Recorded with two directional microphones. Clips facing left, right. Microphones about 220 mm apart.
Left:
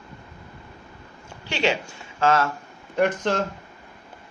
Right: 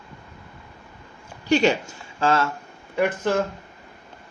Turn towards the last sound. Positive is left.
turn(degrees=-5)  # may be behind; listen again after turning